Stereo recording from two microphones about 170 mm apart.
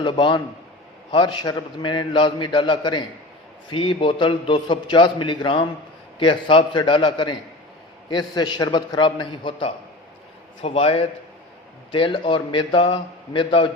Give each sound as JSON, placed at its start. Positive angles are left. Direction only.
{"t": 0.0, "sound": "a man's voice", "side_deg": 30}